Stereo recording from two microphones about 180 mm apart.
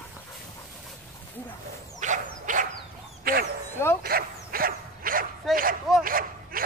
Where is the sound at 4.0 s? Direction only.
55° right (ahead or behind).